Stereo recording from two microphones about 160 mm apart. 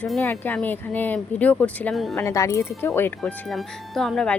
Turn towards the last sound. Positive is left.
turn(degrees=5)  # may be behind; listen again after turning